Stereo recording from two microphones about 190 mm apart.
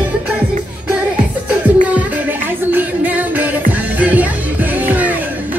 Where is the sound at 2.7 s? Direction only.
10° right (ahead or behind).